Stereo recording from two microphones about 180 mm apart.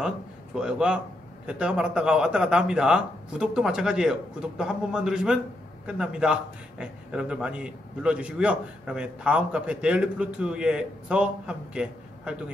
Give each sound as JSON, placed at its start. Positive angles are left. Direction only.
{"t": 0.6, "sound": "a man's voice", "side_deg": -5}